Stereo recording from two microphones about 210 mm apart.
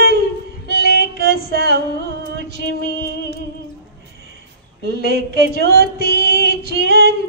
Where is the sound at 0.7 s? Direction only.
50° right (ahead or behind).